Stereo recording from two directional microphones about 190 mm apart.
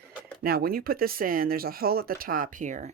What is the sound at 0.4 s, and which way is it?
Speech, 50° right (ahead or behind).